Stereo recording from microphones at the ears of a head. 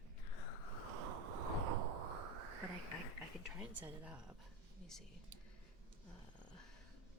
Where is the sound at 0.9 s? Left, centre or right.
Right.